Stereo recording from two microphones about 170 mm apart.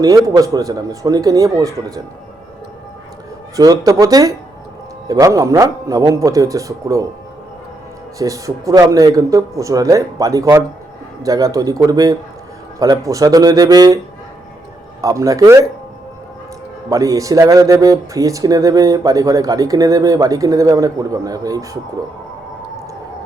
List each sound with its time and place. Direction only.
0.3 s speech: 20° right (ahead or behind)
3.5 s speech: 20° right (ahead or behind)
8.2 s speech: 20° right (ahead or behind)
15.0 s speech: 20° right (ahead or behind)
16.9 s speech: 20° right (ahead or behind)